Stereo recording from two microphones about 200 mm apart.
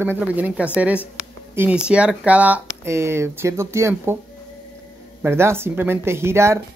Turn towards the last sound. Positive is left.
turn(degrees=-15)  # may be behind; listen again after turning